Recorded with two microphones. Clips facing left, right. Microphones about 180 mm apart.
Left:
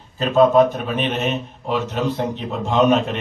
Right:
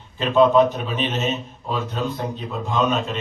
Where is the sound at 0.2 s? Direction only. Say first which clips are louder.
Left 2 dB; 40° left (ahead or behind).